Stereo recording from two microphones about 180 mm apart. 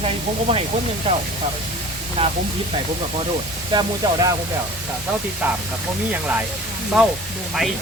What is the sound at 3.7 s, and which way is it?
Speech, 20° right (ahead or behind).